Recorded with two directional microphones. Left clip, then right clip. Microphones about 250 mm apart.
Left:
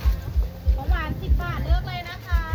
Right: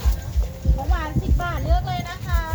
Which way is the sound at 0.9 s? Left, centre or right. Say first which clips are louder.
Even; right.